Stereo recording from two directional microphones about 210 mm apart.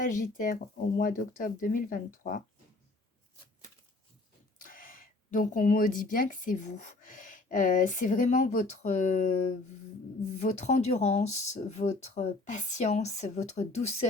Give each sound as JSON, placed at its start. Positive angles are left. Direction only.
{"t": 0.0, "sound": "speech", "side_deg": 40}
{"t": 4.5, "sound": "speech", "side_deg": 40}
{"t": 10.3, "sound": "speech", "side_deg": 35}